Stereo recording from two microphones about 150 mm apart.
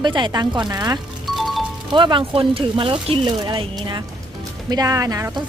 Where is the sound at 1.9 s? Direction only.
35° right (ahead or behind).